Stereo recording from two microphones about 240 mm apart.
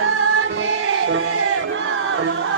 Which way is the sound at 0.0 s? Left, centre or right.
Right.